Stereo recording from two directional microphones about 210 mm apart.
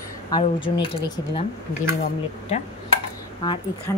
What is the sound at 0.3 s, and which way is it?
A woman's voice, 25° left (ahead or behind).